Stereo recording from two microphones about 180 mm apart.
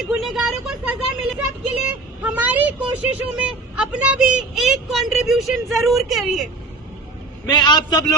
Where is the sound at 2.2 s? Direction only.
10° right (ahead or behind).